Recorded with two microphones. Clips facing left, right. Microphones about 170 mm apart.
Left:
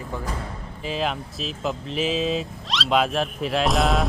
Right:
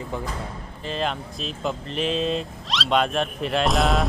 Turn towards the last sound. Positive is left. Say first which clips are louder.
# even
turn(degrees=0)  # may be behind; listen again after turning